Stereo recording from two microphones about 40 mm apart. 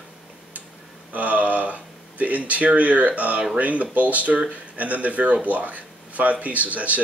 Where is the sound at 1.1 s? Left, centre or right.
Right.